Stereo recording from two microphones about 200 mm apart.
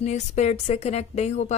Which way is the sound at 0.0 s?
35° left (ahead or behind).